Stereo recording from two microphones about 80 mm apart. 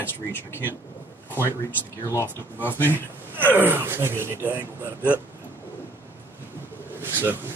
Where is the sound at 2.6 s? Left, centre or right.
Left.